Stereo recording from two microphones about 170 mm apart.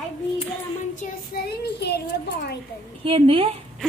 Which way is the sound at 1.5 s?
75° left (ahead or behind).